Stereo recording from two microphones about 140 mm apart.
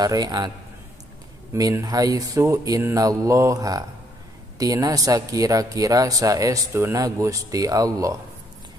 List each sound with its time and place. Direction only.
0.0 s speech: 30° right (ahead or behind)
1.5 s speech: 25° right (ahead or behind)